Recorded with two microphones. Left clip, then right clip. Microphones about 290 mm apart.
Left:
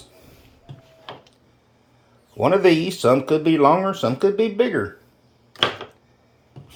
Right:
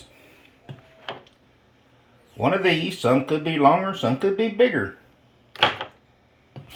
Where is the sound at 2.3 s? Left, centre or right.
Centre.